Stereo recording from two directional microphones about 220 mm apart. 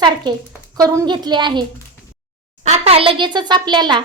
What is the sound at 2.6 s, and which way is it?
A child's voice, 30° right (ahead or behind).